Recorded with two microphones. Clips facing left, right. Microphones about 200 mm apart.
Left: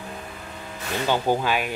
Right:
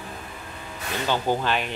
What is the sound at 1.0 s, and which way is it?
Speech, 15° left (ahead or behind).